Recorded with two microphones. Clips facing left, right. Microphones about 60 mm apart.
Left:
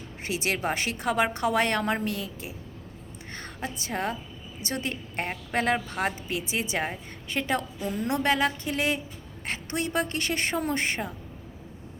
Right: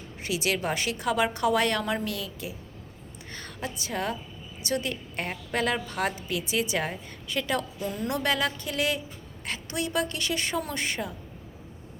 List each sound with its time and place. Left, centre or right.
0.3 s a woman's voice: left
7.8 s a woman's voice: centre
8.0 s a woman's voice: left